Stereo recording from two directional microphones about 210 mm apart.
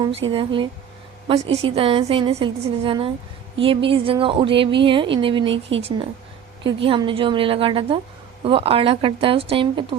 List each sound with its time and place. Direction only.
0.0 s speech: 25° right (ahead or behind)
6.7 s speech: 25° right (ahead or behind)